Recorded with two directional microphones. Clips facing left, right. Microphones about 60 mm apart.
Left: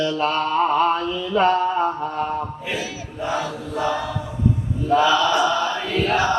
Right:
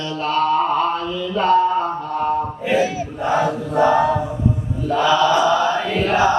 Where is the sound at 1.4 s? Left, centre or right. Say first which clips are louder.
Right 2 dB; left.